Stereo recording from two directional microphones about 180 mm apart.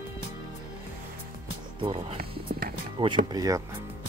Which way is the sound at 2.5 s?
55° right (ahead or behind).